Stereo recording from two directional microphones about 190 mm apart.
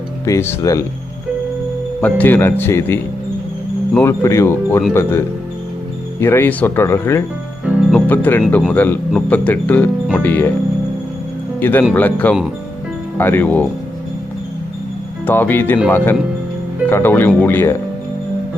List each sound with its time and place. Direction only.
0.3 s speech: 15° left (ahead or behind)
2.0 s speech: 10° left (ahead or behind)
6.1 s speech: 10° left (ahead or behind)
11.6 s speech: 10° left (ahead or behind)
15.3 s speech: 10° left (ahead or behind)